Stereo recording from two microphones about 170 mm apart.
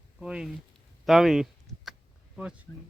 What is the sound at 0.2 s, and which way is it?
Speech, 5° right (ahead or behind).